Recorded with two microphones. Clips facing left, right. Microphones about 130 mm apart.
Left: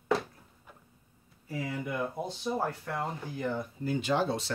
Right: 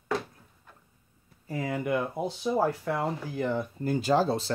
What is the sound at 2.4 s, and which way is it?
Speech, 90° right.